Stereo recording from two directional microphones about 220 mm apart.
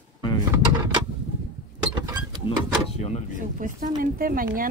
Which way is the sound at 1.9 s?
20° right (ahead or behind).